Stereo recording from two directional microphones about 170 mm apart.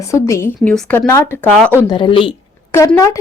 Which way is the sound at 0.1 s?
15° left (ahead or behind).